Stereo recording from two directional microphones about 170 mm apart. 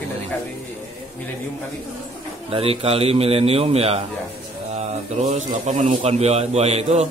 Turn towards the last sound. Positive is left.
turn(degrees=-40)  # may be behind; listen again after turning